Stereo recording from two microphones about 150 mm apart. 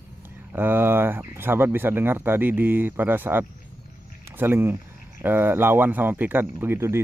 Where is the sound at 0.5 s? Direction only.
15° right (ahead or behind).